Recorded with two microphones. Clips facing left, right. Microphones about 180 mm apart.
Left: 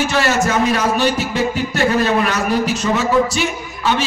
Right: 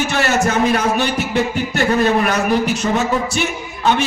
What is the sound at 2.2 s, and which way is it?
Speech, 55° right (ahead or behind).